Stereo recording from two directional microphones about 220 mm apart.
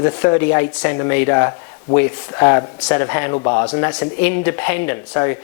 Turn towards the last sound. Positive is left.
turn(degrees=15)  # may be behind; listen again after turning